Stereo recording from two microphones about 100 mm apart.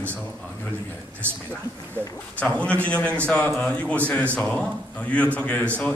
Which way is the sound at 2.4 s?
15° left (ahead or behind).